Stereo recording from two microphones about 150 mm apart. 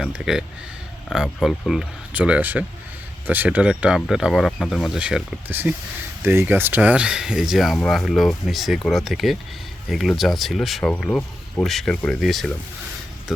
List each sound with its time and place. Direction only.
0.0 s speech: 5° right (ahead or behind)